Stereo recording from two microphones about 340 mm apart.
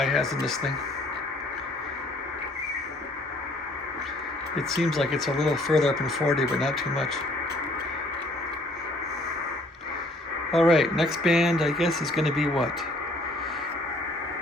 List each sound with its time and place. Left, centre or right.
0.0 s speech: centre
4.5 s speech: centre
10.5 s speech: centre